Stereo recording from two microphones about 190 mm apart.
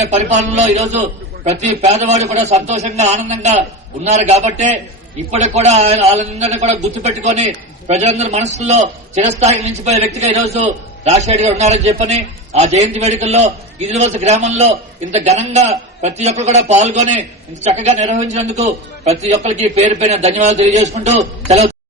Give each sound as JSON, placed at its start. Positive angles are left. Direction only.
{"t": 0.0, "sound": "a man's voice", "side_deg": -40}